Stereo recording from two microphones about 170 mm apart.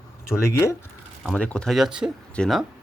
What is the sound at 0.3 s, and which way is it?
Speech, 15° left (ahead or behind).